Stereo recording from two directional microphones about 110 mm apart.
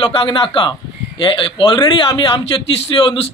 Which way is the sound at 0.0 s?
50° left (ahead or behind).